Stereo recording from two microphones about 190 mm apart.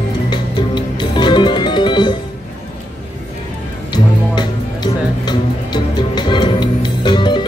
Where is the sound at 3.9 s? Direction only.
25° left (ahead or behind).